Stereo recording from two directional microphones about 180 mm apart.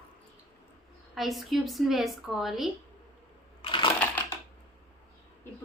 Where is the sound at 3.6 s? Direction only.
25° left (ahead or behind).